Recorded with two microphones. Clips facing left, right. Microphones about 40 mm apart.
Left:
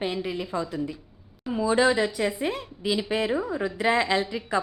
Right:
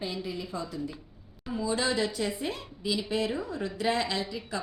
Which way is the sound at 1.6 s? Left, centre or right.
Left.